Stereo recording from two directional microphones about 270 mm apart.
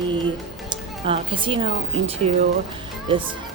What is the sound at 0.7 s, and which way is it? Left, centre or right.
Speech, centre.